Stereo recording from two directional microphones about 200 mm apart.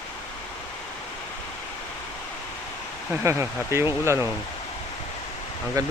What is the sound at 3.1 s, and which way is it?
Speech, 15° right (ahead or behind).